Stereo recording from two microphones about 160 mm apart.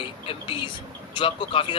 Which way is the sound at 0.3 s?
35° left (ahead or behind).